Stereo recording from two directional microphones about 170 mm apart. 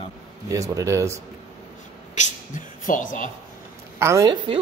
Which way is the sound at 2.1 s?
45° left (ahead or behind).